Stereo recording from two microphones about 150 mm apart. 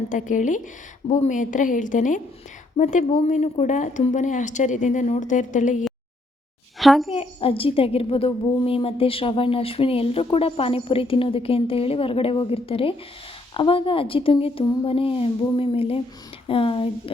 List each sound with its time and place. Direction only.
0.1 s a woman's voice: 55° left (ahead or behind)
6.7 s a woman's voice: centre (ahead or behind)
7.1 s a woman's voice: 40° left (ahead or behind)